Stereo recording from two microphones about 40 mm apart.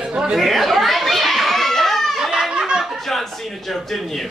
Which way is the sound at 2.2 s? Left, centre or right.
Centre.